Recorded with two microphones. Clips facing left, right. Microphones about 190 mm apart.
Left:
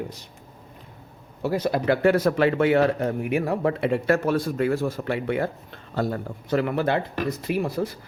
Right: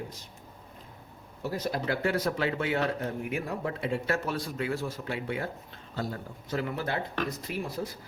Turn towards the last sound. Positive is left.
turn(degrees=65)  # may be behind; listen again after turning